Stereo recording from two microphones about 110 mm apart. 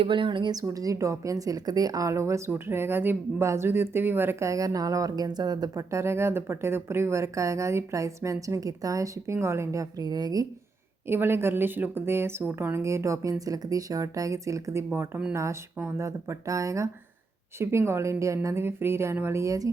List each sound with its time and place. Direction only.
0.0 s a woman's voice: 50° right (ahead or behind)
0.7 s speech: 30° right (ahead or behind)
10.0 s speech: 35° right (ahead or behind)
11.1 s speech: 20° right (ahead or behind)